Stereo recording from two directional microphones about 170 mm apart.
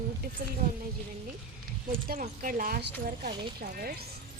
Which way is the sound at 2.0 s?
50° right (ahead or behind).